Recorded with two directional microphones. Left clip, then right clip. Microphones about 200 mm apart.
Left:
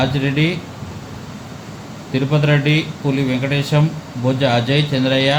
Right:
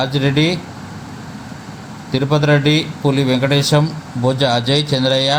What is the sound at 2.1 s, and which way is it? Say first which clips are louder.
A man's voice: right 3 dB; 45° right (ahead or behind).